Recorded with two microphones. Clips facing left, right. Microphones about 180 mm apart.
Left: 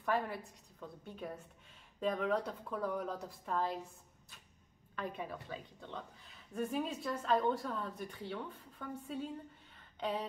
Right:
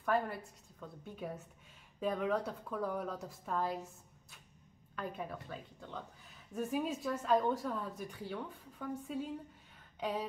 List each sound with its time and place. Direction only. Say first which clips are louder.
0.0 s speech: right 2 dB; centre (ahead or behind)
4.9 s a woman's voice: even; centre (ahead or behind)